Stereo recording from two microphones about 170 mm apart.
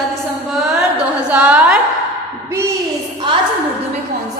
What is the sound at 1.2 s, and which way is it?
Speech, 10° right (ahead or behind).